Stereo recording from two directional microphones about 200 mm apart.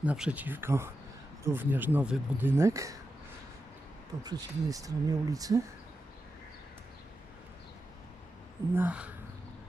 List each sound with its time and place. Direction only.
0.0 s speech: 5° right (ahead or behind)
4.2 s speech: 20° right (ahead or behind)
8.7 s speech: 10° right (ahead or behind)